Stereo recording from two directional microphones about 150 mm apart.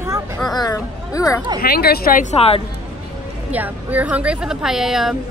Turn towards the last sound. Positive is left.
turn(degrees=0)  # may be behind; listen again after turning